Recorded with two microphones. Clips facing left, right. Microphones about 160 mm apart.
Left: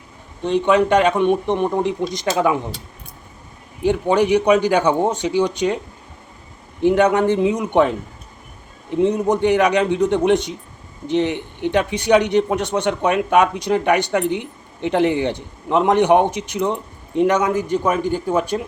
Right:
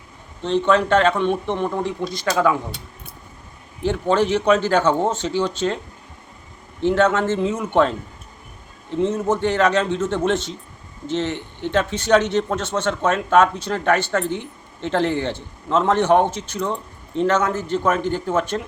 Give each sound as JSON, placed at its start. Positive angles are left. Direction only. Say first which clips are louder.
{"t": 0.4, "sound": "a man's voice", "louder": "left 2 dB", "side_deg": 15}
{"t": 3.8, "sound": "a man's voice", "louder": "left 3 dB", "side_deg": 15}
{"t": 6.8, "sound": "a man's voice", "louder": "left 3 dB", "side_deg": 15}